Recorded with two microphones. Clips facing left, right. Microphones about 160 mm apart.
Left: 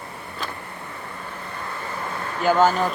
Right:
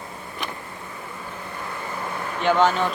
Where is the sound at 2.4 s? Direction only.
5° left (ahead or behind).